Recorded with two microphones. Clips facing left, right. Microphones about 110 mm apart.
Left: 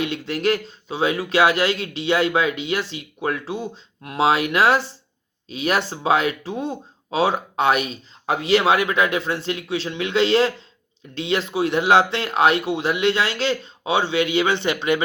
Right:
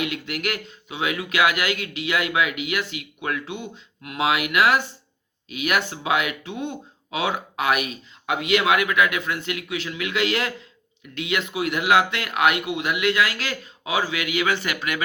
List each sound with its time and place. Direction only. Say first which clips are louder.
0.0 s speech: left 5 dB; 30° left (ahead or behind)